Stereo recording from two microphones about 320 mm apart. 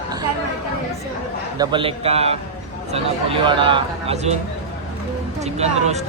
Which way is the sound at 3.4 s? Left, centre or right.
Centre.